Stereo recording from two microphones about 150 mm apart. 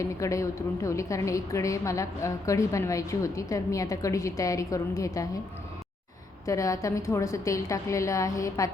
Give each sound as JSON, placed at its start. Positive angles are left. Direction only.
{"t": 0.0, "sound": "a woman's voice", "side_deg": 20}
{"t": 6.4, "sound": "a woman's voice", "side_deg": 20}